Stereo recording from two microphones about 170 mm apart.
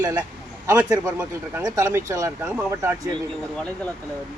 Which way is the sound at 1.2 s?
10° right (ahead or behind).